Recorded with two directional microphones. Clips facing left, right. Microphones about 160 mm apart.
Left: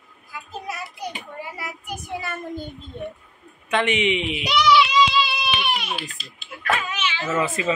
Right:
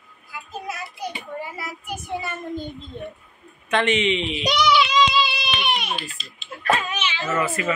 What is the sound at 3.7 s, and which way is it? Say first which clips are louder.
Speech: right 1 dB; 10° left (ahead or behind).